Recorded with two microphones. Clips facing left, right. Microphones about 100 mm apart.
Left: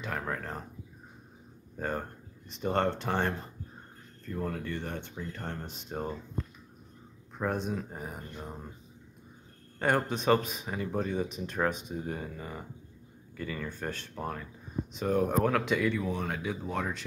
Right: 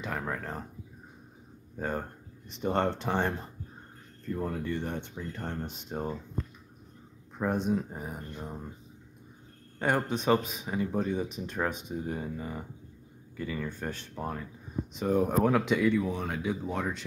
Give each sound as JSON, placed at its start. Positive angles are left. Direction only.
{"t": 0.0, "sound": "speech", "side_deg": -5}
{"t": 1.8, "sound": "speech", "side_deg": -5}
{"t": 5.4, "sound": "speech", "side_deg": -5}
{"t": 7.3, "sound": "speech", "side_deg": -15}
{"t": 9.8, "sound": "speech", "side_deg": -10}